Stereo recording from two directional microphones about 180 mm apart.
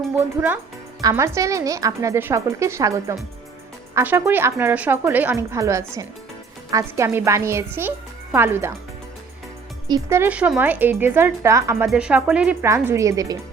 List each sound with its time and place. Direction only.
0.2 s a woman's voice: 10° right (ahead or behind)
9.9 s a woman's voice: 15° right (ahead or behind)
11.9 s a woman's voice: 5° right (ahead or behind)